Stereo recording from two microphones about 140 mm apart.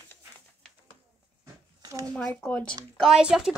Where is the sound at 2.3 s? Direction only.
10° left (ahead or behind).